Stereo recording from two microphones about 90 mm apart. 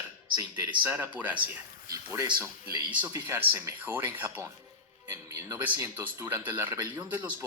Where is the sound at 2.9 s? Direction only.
20° right (ahead or behind).